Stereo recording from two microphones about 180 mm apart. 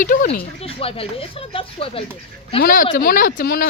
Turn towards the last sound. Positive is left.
turn(degrees=55)  # may be behind; listen again after turning